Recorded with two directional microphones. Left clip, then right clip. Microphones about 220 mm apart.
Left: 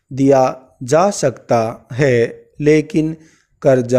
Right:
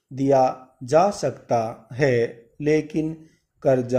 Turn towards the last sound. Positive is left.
turn(degrees=45)  # may be behind; listen again after turning